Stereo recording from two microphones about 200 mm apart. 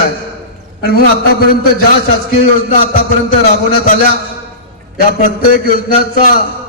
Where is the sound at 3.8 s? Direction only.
40° left (ahead or behind).